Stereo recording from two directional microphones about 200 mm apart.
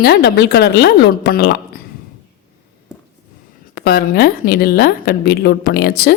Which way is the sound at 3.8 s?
50° left (ahead or behind).